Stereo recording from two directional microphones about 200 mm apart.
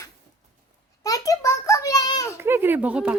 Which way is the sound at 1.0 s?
15° left (ahead or behind).